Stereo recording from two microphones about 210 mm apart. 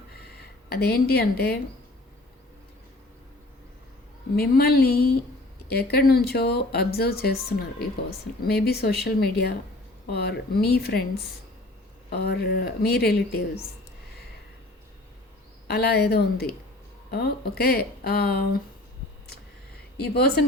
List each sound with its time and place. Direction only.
0.2 s speech: 50° left (ahead or behind)
4.4 s speech: 45° left (ahead or behind)
15.6 s speech: 50° left (ahead or behind)
20.1 s speech: 50° left (ahead or behind)